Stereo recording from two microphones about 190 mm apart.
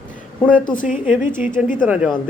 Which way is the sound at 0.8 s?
45° left (ahead or behind).